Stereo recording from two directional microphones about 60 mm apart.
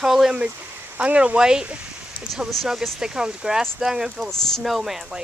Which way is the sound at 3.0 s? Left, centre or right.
Centre.